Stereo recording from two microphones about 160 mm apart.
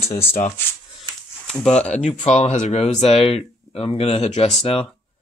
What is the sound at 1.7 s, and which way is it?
Speech, 45° left (ahead or behind).